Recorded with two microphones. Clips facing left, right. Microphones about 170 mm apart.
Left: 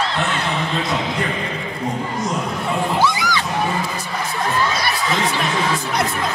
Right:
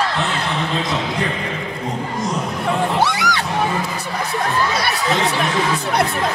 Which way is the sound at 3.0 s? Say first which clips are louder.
Even; 70° right (ahead or behind).